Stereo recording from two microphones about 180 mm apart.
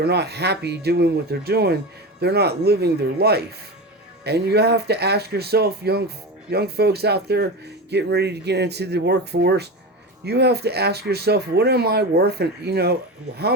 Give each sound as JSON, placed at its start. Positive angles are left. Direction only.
{"t": 0.0, "sound": "speech", "side_deg": -65}